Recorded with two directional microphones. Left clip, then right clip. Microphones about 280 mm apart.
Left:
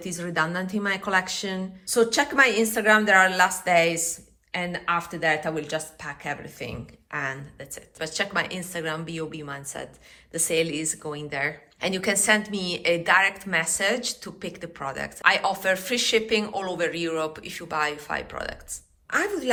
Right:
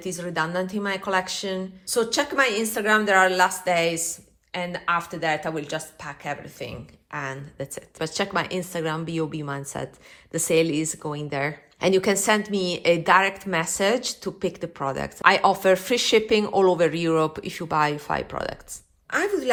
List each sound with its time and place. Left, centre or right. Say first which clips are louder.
0.0 s a woman's voice: even; centre